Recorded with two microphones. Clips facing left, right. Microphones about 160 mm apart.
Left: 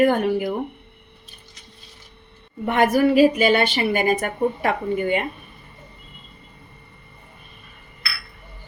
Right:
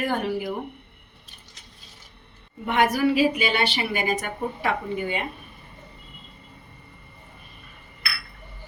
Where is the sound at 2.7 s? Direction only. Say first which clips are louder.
Left 4 dB; 50° left (ahead or behind).